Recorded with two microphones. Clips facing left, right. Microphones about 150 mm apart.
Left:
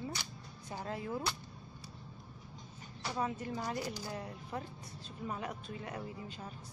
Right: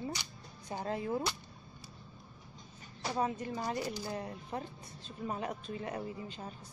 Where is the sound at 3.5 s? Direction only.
20° right (ahead or behind).